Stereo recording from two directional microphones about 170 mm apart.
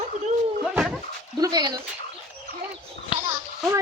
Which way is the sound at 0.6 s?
5° right (ahead or behind).